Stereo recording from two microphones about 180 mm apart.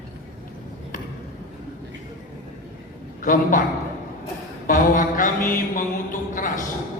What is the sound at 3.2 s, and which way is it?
Speech, 50° left (ahead or behind).